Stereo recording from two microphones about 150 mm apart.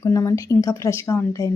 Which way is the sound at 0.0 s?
20° left (ahead or behind).